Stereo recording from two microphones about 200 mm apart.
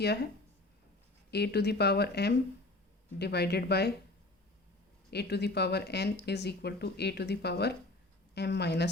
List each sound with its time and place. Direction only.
1.3 s speech: 55° left (ahead or behind)
5.1 s speech: 55° left (ahead or behind)